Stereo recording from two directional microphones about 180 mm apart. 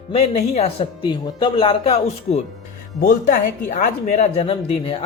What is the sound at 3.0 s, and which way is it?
Speech, 55° left (ahead or behind).